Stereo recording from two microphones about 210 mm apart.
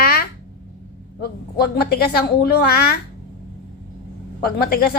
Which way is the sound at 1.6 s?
50° left (ahead or behind).